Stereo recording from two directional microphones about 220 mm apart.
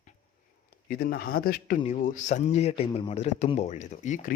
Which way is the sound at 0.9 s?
45° left (ahead or behind).